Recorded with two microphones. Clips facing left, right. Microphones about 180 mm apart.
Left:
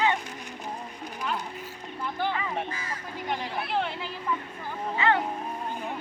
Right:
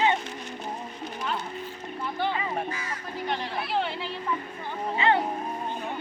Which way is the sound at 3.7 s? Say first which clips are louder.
Right 1 dB; centre (ahead or behind).